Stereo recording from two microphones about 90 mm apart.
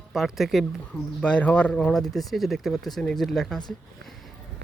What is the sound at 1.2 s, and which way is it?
Speech, 15° left (ahead or behind).